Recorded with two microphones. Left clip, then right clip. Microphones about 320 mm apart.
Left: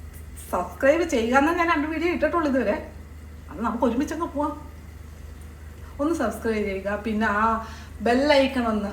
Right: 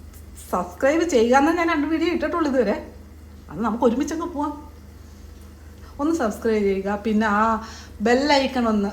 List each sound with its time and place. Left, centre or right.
0.5 s a woman's voice: right
6.0 s a woman's voice: right